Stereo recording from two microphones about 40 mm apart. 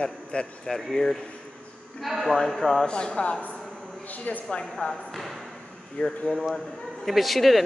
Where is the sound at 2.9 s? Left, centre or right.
Left.